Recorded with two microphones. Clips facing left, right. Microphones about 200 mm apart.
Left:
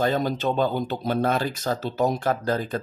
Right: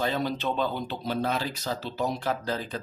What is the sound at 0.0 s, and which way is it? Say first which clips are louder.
Speech: left 5 dB; 45° left (ahead or behind).